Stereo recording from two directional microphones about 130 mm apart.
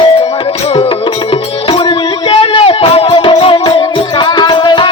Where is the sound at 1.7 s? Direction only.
45° left (ahead or behind).